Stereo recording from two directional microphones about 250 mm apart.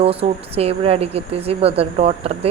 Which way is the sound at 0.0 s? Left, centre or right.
Right.